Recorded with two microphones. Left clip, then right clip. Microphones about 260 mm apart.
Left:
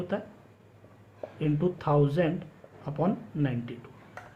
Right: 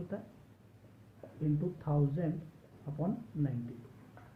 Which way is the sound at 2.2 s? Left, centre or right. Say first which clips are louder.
Left 11 dB; left.